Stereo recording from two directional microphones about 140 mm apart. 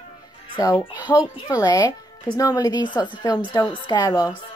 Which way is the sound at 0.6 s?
25° left (ahead or behind).